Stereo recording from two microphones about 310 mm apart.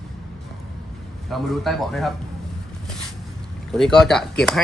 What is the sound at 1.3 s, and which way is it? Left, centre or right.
Speech, centre.